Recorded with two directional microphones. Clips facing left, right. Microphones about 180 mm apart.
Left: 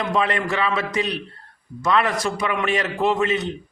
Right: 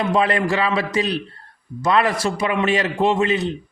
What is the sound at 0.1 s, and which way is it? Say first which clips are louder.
A man's voice: right 3 dB; 35° right (ahead or behind).